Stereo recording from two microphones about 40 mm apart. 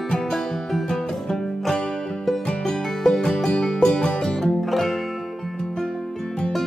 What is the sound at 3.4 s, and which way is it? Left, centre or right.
Music, centre.